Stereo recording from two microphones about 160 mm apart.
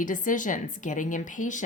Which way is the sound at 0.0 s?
55° left (ahead or behind).